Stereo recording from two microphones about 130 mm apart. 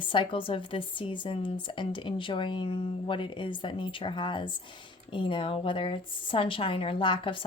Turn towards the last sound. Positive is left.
turn(degrees=40)  # may be behind; listen again after turning